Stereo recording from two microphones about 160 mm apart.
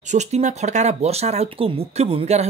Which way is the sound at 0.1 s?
45° right (ahead or behind).